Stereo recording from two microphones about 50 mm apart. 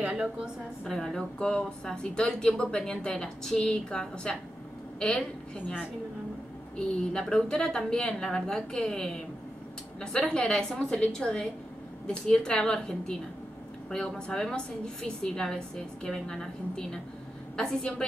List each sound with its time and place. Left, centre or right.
0.0 s a sound: right
0.8 s a woman's voice: centre
7.1 s a woman's voice: centre